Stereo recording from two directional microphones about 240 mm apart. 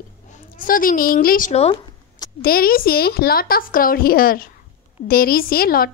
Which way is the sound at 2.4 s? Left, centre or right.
Left.